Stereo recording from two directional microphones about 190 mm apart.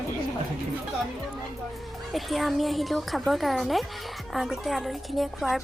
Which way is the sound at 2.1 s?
Centre (ahead or behind).